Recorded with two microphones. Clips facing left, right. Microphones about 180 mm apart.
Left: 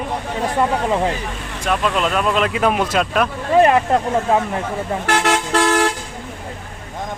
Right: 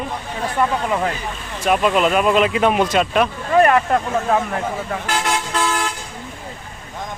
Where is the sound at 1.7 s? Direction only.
10° right (ahead or behind).